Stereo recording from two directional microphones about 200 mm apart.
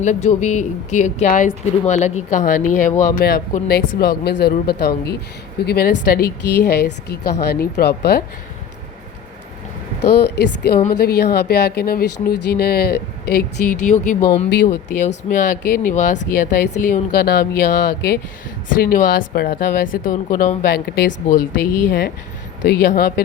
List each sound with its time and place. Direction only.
0.0 s speech: 35° left (ahead or behind)
2.9 s speech: 15° left (ahead or behind)
3.2 s speech: 50° left (ahead or behind)
10.0 s speech: 55° left (ahead or behind)
14.5 s speech: 60° left (ahead or behind)
15.3 s speech: 40° left (ahead or behind)
16.1 s speech: 55° left (ahead or behind); by 17.0 s 40° left (ahead or behind)
17.1 s speech: 50° left (ahead or behind)